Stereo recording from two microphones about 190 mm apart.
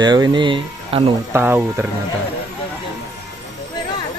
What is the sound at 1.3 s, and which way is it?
Speech, 10° right (ahead or behind).